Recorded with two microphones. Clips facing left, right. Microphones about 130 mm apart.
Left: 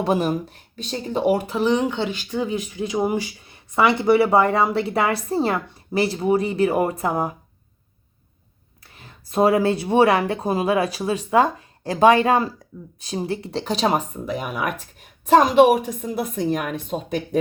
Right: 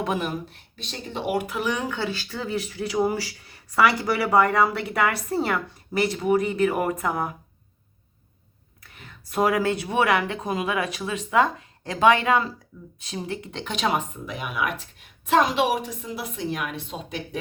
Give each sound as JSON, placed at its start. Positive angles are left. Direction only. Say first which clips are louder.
{"t": 0.0, "sound": "speech", "louder": "left 6 dB", "side_deg": 35}
{"t": 8.8, "sound": "speech", "louder": "even", "side_deg": 30}